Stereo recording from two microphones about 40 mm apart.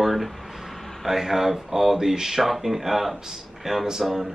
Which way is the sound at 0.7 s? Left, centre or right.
Centre.